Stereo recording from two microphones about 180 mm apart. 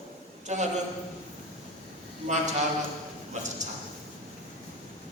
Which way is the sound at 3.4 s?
40° right (ahead or behind).